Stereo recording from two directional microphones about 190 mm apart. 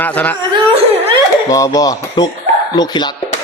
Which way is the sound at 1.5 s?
20° left (ahead or behind).